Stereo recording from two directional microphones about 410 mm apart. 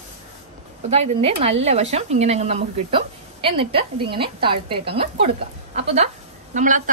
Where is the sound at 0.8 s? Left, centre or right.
Centre.